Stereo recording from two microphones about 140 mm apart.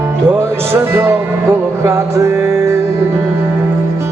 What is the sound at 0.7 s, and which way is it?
Speech, 20° right (ahead or behind).